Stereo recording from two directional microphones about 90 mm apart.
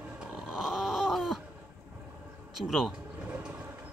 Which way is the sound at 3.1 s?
15° right (ahead or behind).